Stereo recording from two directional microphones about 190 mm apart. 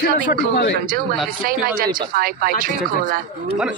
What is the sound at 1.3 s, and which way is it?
Speech, 50° right (ahead or behind).